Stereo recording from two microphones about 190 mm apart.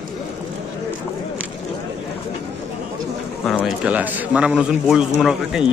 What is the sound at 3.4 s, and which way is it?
A man's voice, centre (ahead or behind).